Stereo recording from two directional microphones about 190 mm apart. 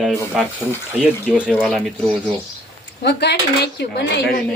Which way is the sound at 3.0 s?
60° left (ahead or behind).